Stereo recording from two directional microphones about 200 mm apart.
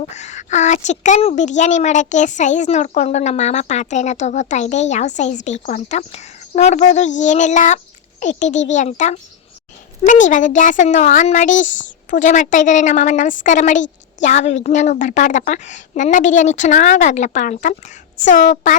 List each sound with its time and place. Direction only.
0.1 s a woman's voice: 35° left (ahead or behind)